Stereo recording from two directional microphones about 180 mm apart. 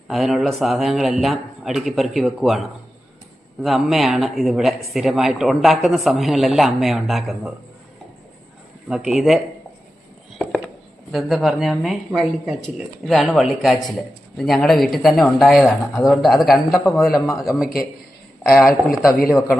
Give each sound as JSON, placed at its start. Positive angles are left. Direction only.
{"t": 0.1, "sound": "a man's voice", "side_deg": 0}
{"t": 8.9, "sound": "a man's voice", "side_deg": -5}
{"t": 11.1, "sound": "a man's voice", "side_deg": 0}
{"t": 17.2, "sound": "speech", "side_deg": 15}
{"t": 18.6, "sound": "a man's voice", "side_deg": 0}